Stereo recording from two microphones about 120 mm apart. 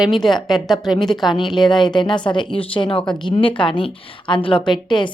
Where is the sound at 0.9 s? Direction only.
35° left (ahead or behind).